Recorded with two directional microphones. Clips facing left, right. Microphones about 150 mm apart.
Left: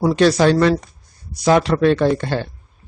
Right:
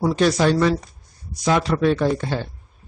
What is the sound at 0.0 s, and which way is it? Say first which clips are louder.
Speech: left 4 dB; 75° left (ahead or behind).